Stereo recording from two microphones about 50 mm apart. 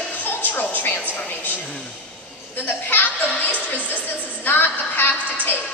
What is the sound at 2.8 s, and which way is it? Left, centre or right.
A woman's voice, left.